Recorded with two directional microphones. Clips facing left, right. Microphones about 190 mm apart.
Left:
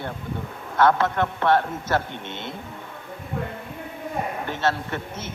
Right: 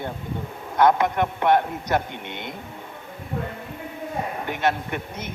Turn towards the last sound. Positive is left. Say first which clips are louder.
# even
turn(degrees=-15)  # may be behind; listen again after turning